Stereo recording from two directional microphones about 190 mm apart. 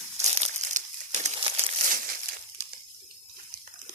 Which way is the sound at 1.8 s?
45° right (ahead or behind).